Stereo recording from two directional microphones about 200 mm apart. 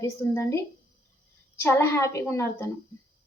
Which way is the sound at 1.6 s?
10° left (ahead or behind).